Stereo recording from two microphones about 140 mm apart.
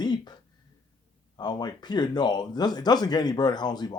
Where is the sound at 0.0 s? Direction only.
30° left (ahead or behind).